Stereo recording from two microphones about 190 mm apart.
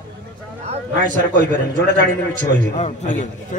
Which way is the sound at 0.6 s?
40° right (ahead or behind).